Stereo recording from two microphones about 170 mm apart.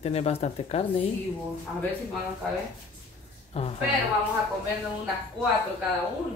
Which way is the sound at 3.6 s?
35° left (ahead or behind).